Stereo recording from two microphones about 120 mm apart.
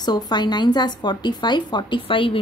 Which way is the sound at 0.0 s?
35° left (ahead or behind).